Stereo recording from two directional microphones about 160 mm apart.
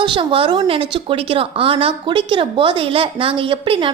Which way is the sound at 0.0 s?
30° right (ahead or behind).